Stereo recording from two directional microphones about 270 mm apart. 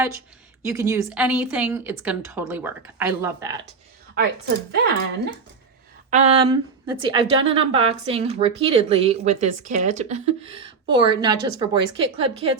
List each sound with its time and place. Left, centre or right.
0.6 s a woman's voice: centre
4.7 s speech: right
6.1 s speech: right